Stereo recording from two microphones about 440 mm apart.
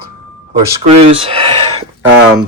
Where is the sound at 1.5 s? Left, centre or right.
Right.